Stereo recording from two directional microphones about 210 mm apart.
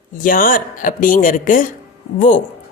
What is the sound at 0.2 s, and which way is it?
Speech, 40° left (ahead or behind).